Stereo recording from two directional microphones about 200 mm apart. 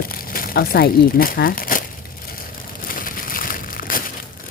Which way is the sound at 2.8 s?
45° left (ahead or behind).